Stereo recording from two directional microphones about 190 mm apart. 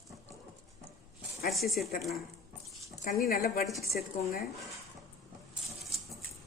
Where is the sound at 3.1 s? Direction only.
50° left (ahead or behind).